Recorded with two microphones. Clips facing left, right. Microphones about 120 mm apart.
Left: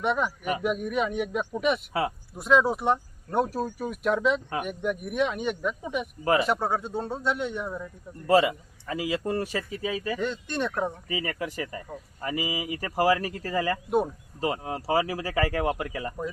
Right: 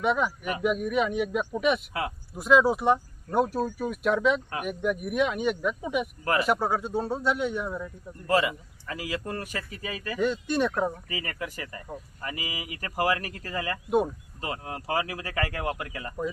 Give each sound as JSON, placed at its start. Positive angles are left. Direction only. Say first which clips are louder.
{"t": 0.0, "sound": "speech", "louder": "right 1 dB", "side_deg": 0}
{"t": 6.2, "sound": "speech", "louder": "left 5 dB", "side_deg": 25}
{"t": 6.5, "sound": "speech", "louder": "right 1 dB", "side_deg": -5}
{"t": 8.3, "sound": "speech", "louder": "left 4 dB", "side_deg": 25}
{"t": 10.2, "sound": "speech", "louder": "right 4 dB", "side_deg": -10}
{"t": 11.1, "sound": "speech", "louder": "left 4 dB", "side_deg": 20}